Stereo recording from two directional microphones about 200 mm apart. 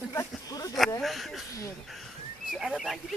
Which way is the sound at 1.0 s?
Centre (ahead or behind).